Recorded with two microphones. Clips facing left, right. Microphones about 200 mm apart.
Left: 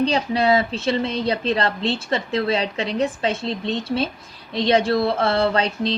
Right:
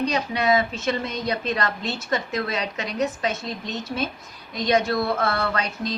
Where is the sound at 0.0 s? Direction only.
30° left (ahead or behind).